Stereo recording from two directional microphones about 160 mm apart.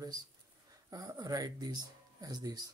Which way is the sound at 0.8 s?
20° right (ahead or behind).